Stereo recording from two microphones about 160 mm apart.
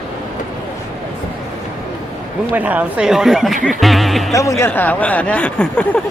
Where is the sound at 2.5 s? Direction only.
10° right (ahead or behind).